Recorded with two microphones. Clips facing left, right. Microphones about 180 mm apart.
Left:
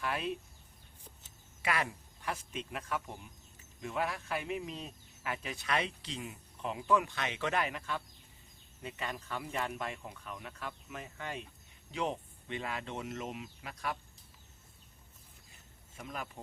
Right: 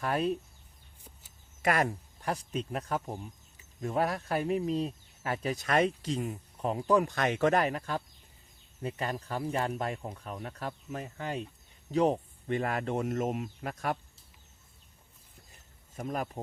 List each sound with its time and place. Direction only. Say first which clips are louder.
0.0 s speech: right 6 dB; 40° right (ahead or behind)
1.6 s speech: right 7 dB; 45° right (ahead or behind)
16.0 s speech: right 9 dB; 45° right (ahead or behind)